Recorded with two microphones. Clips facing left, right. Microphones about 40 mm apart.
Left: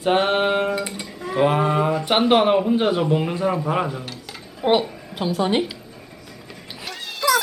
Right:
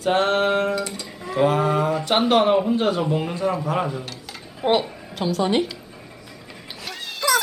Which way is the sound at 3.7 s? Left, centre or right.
Centre.